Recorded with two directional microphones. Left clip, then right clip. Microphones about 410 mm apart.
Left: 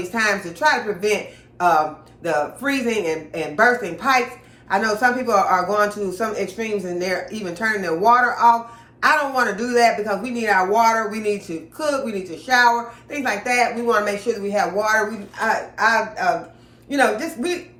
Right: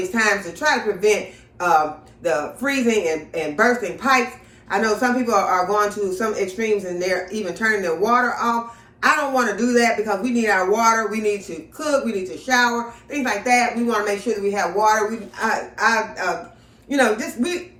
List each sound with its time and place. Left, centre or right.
0.1 s a man's voice: centre